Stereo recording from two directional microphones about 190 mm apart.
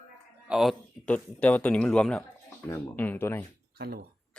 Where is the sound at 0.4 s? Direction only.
Centre (ahead or behind).